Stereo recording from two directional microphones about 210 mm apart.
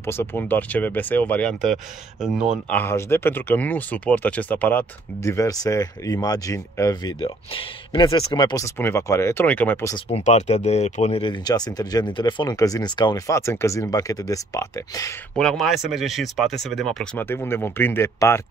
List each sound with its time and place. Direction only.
0.0 s speech: 10° left (ahead or behind)
2.8 s speech: 10° left (ahead or behind)
9.9 s speech: 30° left (ahead or behind)
15.3 s speech: 5° left (ahead or behind)